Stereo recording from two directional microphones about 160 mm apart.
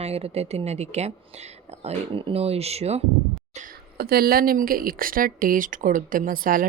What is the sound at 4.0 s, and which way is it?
A woman's voice, 70° right (ahead or behind).